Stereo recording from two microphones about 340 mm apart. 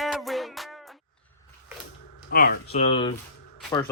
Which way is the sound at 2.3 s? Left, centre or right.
Left.